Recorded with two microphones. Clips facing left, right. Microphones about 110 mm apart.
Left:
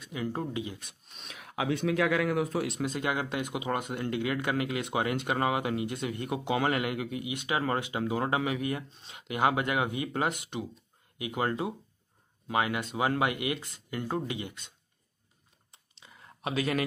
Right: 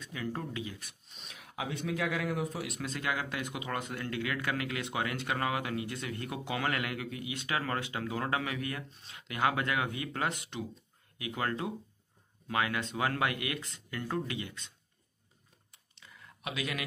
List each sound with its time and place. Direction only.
0.0 s speech: 20° left (ahead or behind)
1.0 s speech: 75° left (ahead or behind)
2.8 s speech: 20° left (ahead or behind)
15.7 s a sound: 30° left (ahead or behind)